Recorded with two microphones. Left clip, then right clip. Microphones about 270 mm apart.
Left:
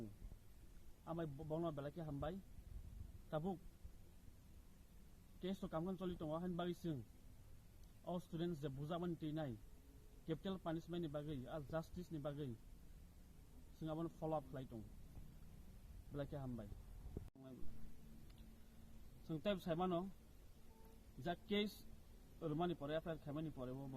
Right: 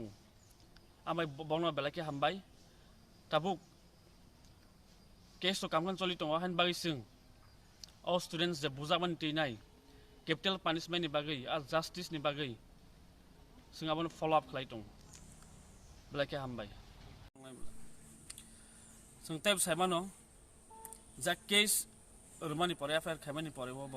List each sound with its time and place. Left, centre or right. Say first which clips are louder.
1.0 s a man's voice: right 12 dB; right
5.4 s a man's voice: right 13 dB; right
8.0 s a man's voice: right 13 dB; right
13.8 s a man's voice: right 11 dB; right
16.1 s a man's voice: right 12 dB; right
19.3 s speech: right 10 dB; centre
21.2 s speech: right 13 dB; centre